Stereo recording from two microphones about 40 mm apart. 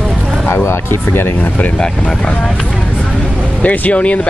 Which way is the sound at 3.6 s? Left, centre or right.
Left.